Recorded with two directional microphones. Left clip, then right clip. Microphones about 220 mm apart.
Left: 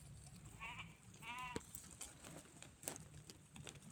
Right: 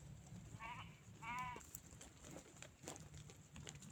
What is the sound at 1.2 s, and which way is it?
Sheep, 15° left (ahead or behind).